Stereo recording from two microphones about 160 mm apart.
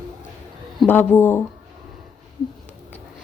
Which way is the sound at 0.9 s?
10° left (ahead or behind).